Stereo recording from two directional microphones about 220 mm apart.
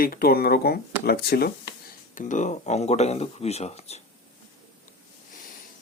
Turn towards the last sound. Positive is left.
turn(degrees=30)  # may be behind; listen again after turning